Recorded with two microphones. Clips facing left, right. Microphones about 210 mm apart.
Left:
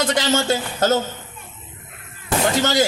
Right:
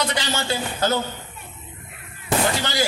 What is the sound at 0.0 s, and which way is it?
Speech, 50° left (ahead or behind).